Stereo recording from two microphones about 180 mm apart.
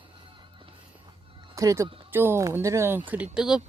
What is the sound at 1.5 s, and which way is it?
Speech, 15° right (ahead or behind).